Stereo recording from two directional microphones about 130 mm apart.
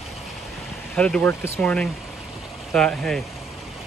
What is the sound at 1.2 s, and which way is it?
Speech, 20° left (ahead or behind).